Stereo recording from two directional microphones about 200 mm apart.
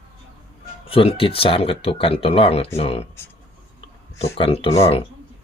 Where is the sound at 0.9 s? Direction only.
25° left (ahead or behind).